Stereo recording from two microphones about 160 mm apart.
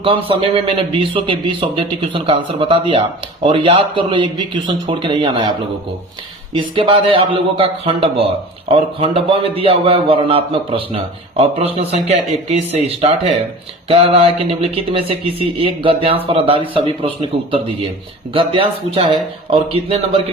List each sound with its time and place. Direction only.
0.3 s speech: 35° right (ahead or behind)
6.5 s speech: 35° right (ahead or behind)
18.9 s speech: 35° right (ahead or behind)